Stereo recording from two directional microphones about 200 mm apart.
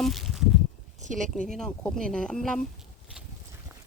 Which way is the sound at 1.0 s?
40° right (ahead or behind).